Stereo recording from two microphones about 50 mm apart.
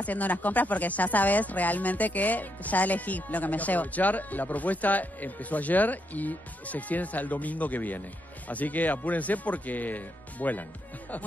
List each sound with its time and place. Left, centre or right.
0.0 s speech: left